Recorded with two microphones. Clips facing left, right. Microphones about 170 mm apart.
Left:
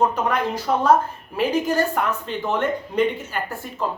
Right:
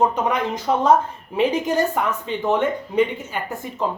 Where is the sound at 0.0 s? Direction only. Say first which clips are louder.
Right 1 dB; 15° right (ahead or behind).